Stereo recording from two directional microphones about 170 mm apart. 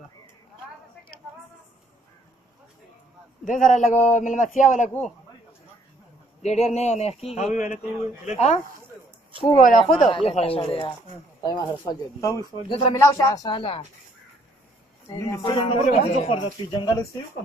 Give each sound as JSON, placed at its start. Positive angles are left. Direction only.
{"t": 3.4, "sound": "speech", "side_deg": 50}
{"t": 6.4, "sound": "a man's voice", "side_deg": 40}
{"t": 9.6, "sound": "speech", "side_deg": 50}
{"t": 10.1, "sound": "a man's voice", "side_deg": 35}
{"t": 15.0, "sound": "speech", "side_deg": 20}
{"t": 15.8, "sound": "a man's voice", "side_deg": 40}
{"t": 16.7, "sound": "speech", "side_deg": 25}